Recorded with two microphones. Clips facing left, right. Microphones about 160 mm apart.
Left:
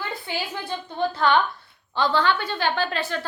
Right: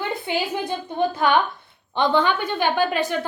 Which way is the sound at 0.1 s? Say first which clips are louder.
Right 5 dB; 25° right (ahead or behind).